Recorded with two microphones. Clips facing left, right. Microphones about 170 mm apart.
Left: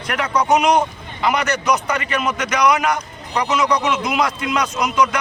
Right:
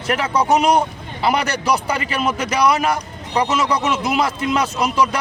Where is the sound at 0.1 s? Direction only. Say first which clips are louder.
Right 1 dB; 30° right (ahead or behind).